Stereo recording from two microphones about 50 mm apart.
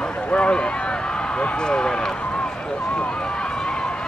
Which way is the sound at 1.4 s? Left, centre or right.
Centre.